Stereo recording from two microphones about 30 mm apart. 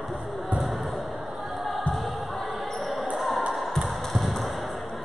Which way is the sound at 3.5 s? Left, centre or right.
Centre.